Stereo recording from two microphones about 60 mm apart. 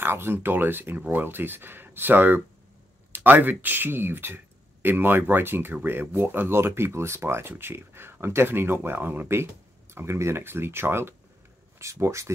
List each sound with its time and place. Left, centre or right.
0.0 s speech: right
9.9 s speech: right
11.8 s speech: right